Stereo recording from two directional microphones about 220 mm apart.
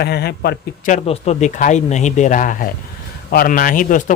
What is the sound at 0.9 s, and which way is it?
A man's voice, 30° left (ahead or behind).